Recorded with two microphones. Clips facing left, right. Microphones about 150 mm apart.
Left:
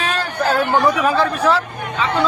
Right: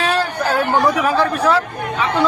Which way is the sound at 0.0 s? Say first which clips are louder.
Right 2 dB; 10° right (ahead or behind).